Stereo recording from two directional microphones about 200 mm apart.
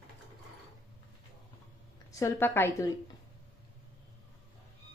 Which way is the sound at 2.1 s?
15° left (ahead or behind).